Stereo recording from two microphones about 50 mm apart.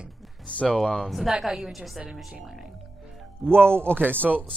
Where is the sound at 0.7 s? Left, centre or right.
Centre.